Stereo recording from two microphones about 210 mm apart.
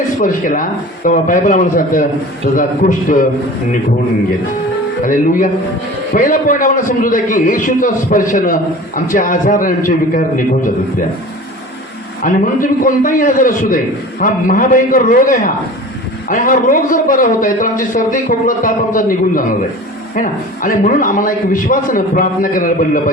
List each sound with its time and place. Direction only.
0.2 s a man's voice: 40° left (ahead or behind)
5.0 s a man's voice: 40° left (ahead or behind)
12.2 s a man's voice: 40° left (ahead or behind)